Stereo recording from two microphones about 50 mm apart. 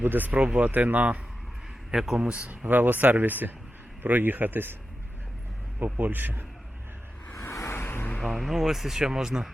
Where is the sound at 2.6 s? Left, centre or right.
Right.